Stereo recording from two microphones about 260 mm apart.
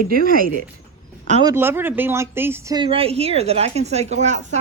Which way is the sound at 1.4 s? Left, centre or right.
Centre.